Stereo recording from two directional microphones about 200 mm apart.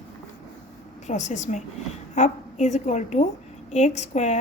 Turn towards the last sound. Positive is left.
turn(degrees=35)  # may be behind; listen again after turning